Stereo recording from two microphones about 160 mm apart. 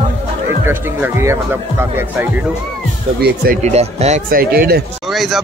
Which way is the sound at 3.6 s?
40° right (ahead or behind).